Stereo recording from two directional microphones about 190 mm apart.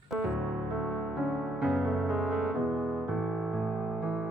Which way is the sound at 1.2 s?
Centre (ahead or behind).